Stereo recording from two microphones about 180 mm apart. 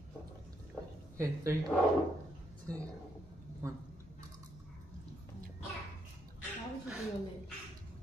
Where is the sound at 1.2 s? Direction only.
15° right (ahead or behind).